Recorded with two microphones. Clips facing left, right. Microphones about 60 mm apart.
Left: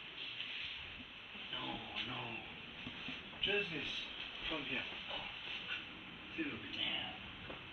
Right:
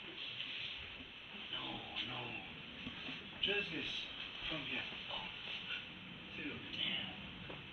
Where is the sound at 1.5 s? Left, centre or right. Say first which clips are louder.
Left 2 dB; centre.